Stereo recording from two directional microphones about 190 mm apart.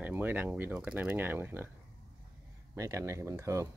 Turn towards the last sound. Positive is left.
turn(degrees=-15)  # may be behind; listen again after turning